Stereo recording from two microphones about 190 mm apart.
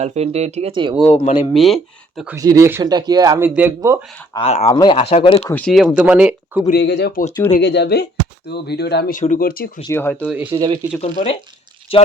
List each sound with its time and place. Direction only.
0.0 s speech: 35° right (ahead or behind)
1.1 s speech: 40° left (ahead or behind)
1.5 s speech: centre (ahead or behind)
2.3 s speech: 15° right (ahead or behind)
4.4 s speech: 30° left (ahead or behind)
5.5 s speech: 5° left (ahead or behind)
6.7 s speech: 60° left (ahead or behind)
9.9 s speech: 10° left (ahead or behind)
10.2 s speech: 10° right (ahead or behind)
10.5 s speech: 25° right (ahead or behind)
11.0 s speech: 35° left (ahead or behind)